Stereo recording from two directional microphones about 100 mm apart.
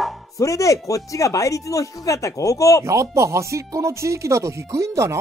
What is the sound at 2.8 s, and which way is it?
Speech, 30° right (ahead or behind).